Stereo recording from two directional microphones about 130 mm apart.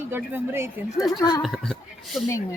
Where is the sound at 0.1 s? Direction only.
15° right (ahead or behind).